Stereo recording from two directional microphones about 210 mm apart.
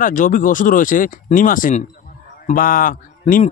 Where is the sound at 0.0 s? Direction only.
40° left (ahead or behind).